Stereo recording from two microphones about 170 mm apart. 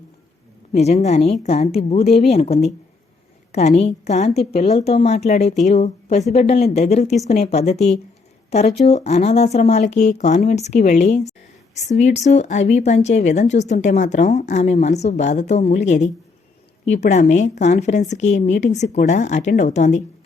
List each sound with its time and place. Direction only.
0.7 s speech: 40° left (ahead or behind)